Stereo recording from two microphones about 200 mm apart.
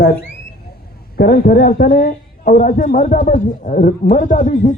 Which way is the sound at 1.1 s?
50° left (ahead or behind).